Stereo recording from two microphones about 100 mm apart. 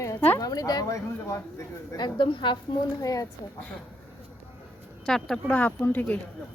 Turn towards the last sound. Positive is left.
turn(degrees=20)  # may be behind; listen again after turning